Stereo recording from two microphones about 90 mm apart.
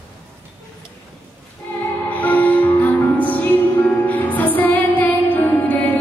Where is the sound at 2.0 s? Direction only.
20° left (ahead or behind).